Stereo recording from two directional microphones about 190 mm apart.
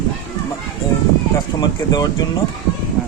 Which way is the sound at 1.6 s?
20° left (ahead or behind).